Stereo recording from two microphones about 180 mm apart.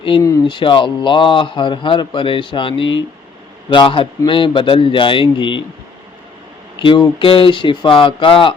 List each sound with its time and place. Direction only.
0.2 s speech: 20° left (ahead or behind)
6.7 s speech: 25° left (ahead or behind)